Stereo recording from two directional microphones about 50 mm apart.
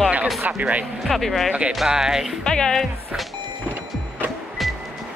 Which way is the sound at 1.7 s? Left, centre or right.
Centre.